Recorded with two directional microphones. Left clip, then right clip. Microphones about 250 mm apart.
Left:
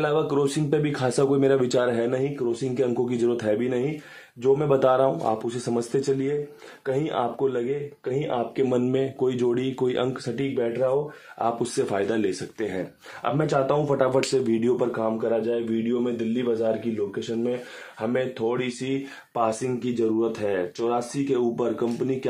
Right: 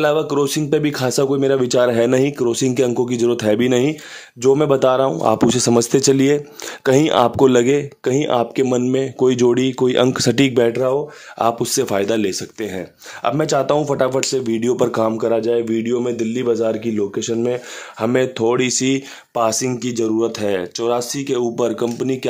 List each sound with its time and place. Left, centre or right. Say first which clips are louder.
0.0 s speech: right 6 dB; right
4.6 s speech: right 5 dB; right
8.6 s speech: right 5 dB; right
11.3 s speech: right 7 dB; right
14.9 s speech: right 7 dB; right